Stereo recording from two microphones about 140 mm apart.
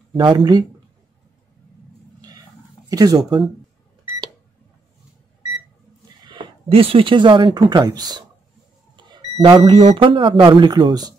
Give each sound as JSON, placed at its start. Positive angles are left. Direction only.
{"t": 0.1, "sound": "speech", "side_deg": -35}
{"t": 2.9, "sound": "speech", "side_deg": -25}
{"t": 6.2, "sound": "speech", "side_deg": -35}